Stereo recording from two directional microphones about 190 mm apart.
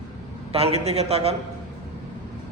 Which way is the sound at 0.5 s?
35° right (ahead or behind).